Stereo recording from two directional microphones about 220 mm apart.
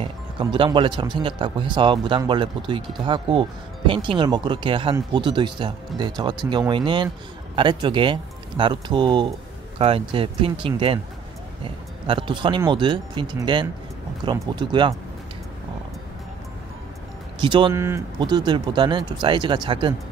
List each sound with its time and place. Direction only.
0.0 s speech: 25° right (ahead or behind)
17.4 s speech: 20° right (ahead or behind)